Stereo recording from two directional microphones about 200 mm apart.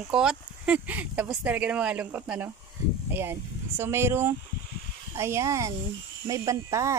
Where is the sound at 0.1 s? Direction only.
5° right (ahead or behind).